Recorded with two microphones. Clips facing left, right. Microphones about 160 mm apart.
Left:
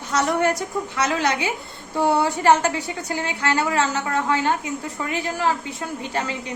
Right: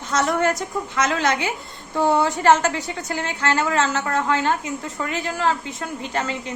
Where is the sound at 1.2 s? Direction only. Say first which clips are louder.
Right 1 dB; 15° left (ahead or behind).